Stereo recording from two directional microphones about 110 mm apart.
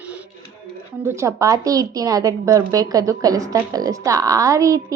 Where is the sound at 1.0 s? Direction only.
30° right (ahead or behind).